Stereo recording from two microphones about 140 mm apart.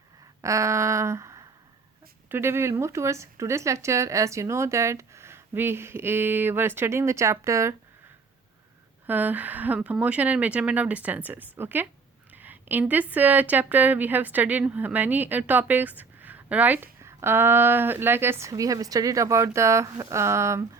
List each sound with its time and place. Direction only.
0.4 s a sound: 20° right (ahead or behind)
2.3 s speech: 15° right (ahead or behind)
9.0 s a woman's voice: 10° right (ahead or behind)